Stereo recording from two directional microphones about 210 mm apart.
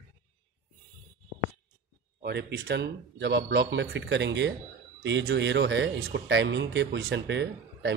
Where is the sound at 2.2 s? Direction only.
50° right (ahead or behind).